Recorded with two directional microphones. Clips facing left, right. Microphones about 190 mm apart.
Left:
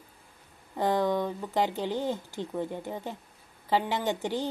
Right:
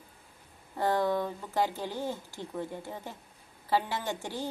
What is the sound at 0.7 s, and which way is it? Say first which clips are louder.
Speech: left 2 dB; 15° left (ahead or behind).